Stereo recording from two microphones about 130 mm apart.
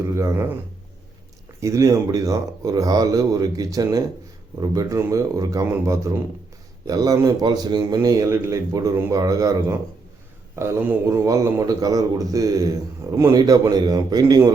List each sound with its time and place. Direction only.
0.0 s a man's voice: 20° right (ahead or behind)
1.6 s a man's voice: 25° right (ahead or behind)